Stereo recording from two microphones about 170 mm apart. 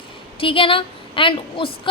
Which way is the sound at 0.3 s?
30° left (ahead or behind).